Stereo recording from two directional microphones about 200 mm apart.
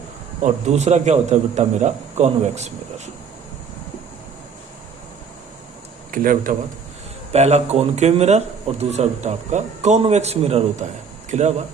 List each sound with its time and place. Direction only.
0.4 s speech: 35° right (ahead or behind)
6.1 s speech: 40° right (ahead or behind)